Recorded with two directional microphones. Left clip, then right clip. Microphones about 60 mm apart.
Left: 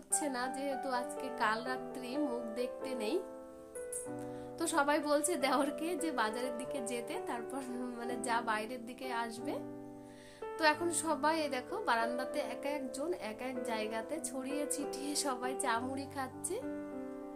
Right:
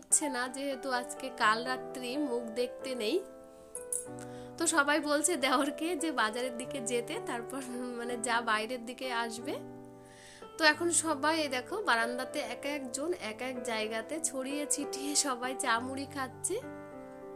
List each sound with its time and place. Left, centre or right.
0.1 s a woman's voice: right
4.5 s a woman's voice: right
7.7 s a woman's voice: right
7.9 s a woman's voice: right
10.6 s a woman's voice: right